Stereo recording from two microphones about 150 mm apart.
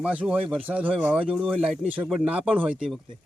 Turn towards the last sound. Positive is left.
turn(degrees=-5)  # may be behind; listen again after turning